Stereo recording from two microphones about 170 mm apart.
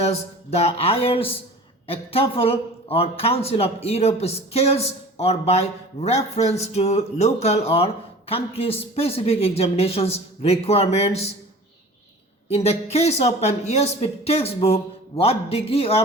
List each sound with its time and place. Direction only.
0.0 s speech: 35° left (ahead or behind)
12.5 s speech: 40° left (ahead or behind)